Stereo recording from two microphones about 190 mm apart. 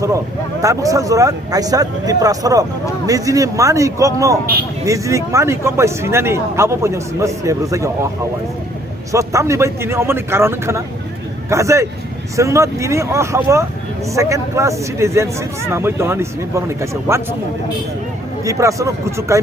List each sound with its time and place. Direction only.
0.6 s speech: 15° right (ahead or behind)
9.1 s speech: 15° right (ahead or behind)
18.4 s speech: 15° right (ahead or behind)